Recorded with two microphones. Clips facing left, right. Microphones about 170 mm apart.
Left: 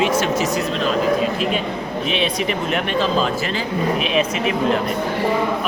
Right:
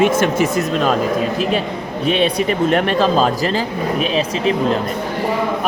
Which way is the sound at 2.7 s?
45° right (ahead or behind).